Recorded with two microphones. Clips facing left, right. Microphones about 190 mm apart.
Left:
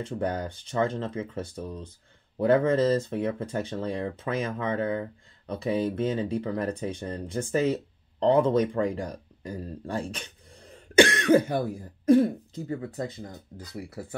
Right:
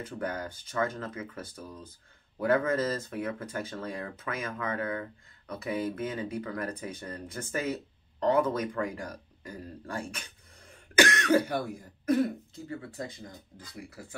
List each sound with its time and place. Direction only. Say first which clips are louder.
0.0 s speech: left 5 dB; 30° left (ahead or behind)